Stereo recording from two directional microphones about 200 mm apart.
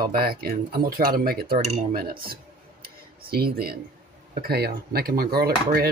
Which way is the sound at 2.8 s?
50° right (ahead or behind).